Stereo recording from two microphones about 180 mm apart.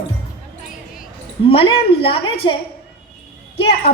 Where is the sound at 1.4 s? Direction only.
30° left (ahead or behind).